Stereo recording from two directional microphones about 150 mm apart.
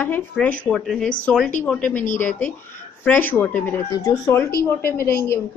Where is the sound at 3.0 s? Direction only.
10° left (ahead or behind).